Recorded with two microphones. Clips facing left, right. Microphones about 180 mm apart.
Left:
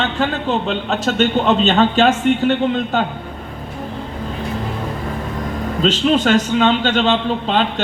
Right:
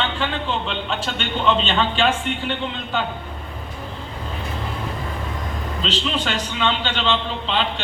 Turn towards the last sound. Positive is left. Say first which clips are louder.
# left 6 dB
turn(degrees=45)  # may be behind; listen again after turning